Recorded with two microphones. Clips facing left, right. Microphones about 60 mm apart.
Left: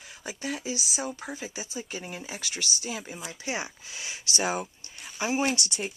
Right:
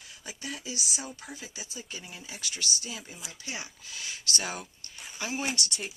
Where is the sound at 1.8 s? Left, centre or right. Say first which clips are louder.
Left 6 dB; left.